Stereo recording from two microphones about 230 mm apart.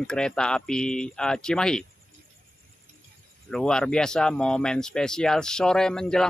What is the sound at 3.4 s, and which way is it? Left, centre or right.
Speech, centre.